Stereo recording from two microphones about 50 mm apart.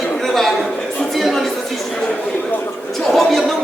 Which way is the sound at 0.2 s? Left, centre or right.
Centre.